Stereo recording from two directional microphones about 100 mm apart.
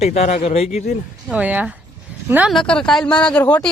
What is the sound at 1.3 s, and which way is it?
Speech, 15° right (ahead or behind).